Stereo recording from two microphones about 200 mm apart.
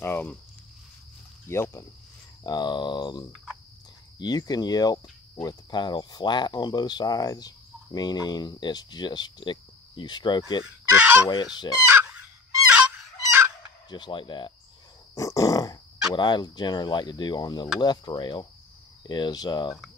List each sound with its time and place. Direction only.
0.0 s a sound: 10° left (ahead or behind)
1.5 s a sound: 15° left (ahead or behind)
2.4 s cricket: 20° left (ahead or behind)
10.6 s fowl: 10° right (ahead or behind)
11.2 s cricket: 20° left (ahead or behind)
11.9 s fowl: 10° right (ahead or behind)
13.8 s cricket: 25° left (ahead or behind)
15.1 s a sound: 15° left (ahead or behind)
16.2 s cricket: 20° left (ahead or behind)